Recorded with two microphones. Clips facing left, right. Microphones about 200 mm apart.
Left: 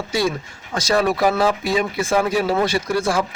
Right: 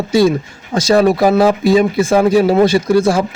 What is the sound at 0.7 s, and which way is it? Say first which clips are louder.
Speech: right 8 dB; 25° right (ahead or behind).